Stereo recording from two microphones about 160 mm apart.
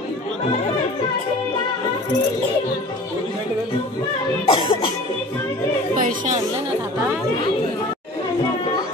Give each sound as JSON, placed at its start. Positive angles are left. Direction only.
{"t": 4.5, "sound": "cough", "side_deg": 30}
{"t": 5.9, "sound": "chatter", "side_deg": -55}